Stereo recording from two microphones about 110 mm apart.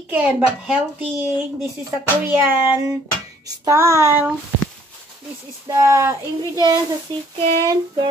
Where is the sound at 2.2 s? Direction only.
20° right (ahead or behind).